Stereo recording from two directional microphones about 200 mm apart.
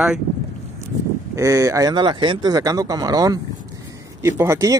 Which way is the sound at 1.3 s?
15° right (ahead or behind).